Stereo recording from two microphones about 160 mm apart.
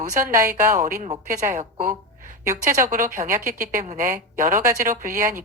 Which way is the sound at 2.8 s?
55° right (ahead or behind).